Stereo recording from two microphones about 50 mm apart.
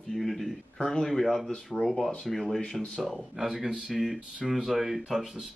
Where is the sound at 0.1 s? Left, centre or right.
Centre.